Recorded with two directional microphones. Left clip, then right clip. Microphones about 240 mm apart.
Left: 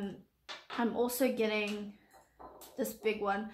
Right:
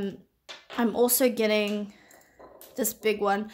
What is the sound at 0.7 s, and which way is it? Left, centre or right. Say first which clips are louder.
Speech: right 8 dB; right.